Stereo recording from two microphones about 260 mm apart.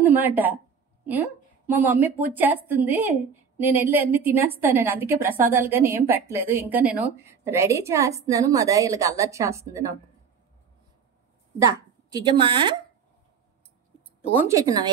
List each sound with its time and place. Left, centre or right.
0.0 s a woman's voice: centre
11.6 s a woman's voice: centre
14.3 s a woman's voice: centre